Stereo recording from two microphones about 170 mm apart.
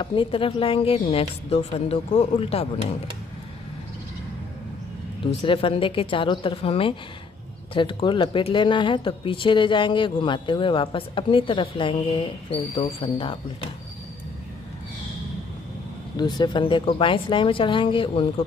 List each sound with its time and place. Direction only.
0.0 s speech: 30° left (ahead or behind)
5.2 s speech: 30° left (ahead or behind)
16.2 s speech: 25° left (ahead or behind)